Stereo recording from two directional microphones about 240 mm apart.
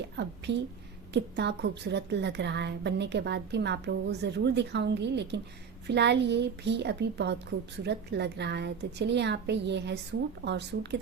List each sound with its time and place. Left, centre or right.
0.2 s a woman's voice: right